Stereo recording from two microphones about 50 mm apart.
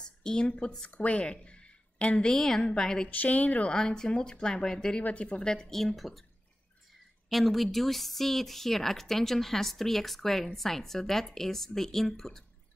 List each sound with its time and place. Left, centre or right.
0.0 s a woman's voice: centre
2.3 s speech: centre
3.1 s speech: left
3.7 s speech: centre
7.2 s speech: centre